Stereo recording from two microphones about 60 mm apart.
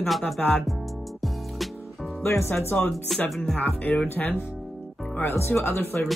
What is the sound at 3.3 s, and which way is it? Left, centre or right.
Speech, centre.